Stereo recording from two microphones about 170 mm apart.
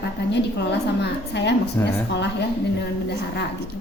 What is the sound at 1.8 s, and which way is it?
Speech, 15° left (ahead or behind).